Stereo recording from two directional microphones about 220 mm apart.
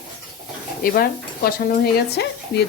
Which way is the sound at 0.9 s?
45° left (ahead or behind).